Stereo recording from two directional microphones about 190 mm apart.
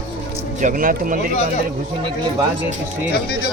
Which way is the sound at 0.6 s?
50° right (ahead or behind).